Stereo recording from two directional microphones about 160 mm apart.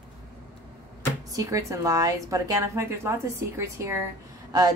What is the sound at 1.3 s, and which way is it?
A woman's voice, 20° right (ahead or behind).